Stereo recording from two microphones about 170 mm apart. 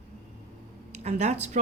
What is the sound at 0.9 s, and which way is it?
Speech, 40° right (ahead or behind).